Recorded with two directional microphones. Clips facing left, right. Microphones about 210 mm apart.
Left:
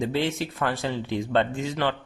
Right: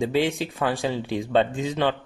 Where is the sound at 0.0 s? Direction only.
15° right (ahead or behind).